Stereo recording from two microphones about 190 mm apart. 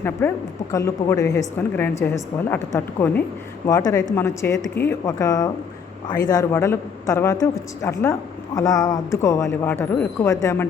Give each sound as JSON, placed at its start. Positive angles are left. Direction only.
{"t": 0.2, "sound": "a woman's voice", "side_deg": 10}